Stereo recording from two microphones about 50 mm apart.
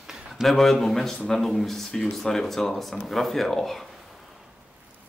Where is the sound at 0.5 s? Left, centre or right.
Centre.